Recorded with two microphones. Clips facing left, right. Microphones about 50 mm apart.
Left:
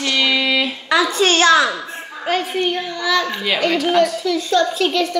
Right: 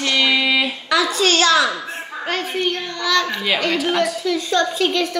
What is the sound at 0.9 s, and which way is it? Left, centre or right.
Speech, left.